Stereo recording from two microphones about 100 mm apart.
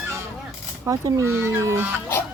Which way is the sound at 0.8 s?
30° right (ahead or behind).